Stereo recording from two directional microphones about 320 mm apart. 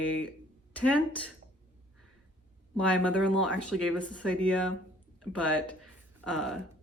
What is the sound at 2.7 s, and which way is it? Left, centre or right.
Speech, centre.